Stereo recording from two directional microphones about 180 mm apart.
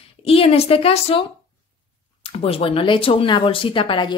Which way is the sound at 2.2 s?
30° left (ahead or behind).